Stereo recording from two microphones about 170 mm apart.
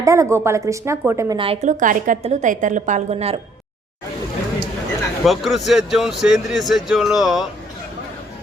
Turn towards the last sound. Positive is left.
turn(degrees=0)  # may be behind; listen again after turning